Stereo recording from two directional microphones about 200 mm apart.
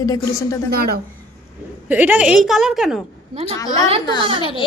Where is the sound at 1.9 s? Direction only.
10° right (ahead or behind).